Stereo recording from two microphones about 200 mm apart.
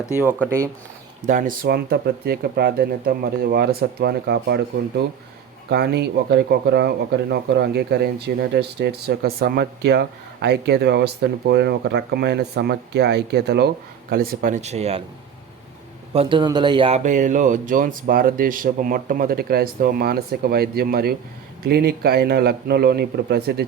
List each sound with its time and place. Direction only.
0.1 s speech: 10° right (ahead or behind)
1.3 s speech: 40° right (ahead or behind)
16.1 s speech: 25° right (ahead or behind); by 23.6 s 50° right (ahead or behind)